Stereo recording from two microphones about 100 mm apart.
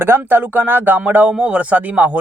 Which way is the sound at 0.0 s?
20° right (ahead or behind).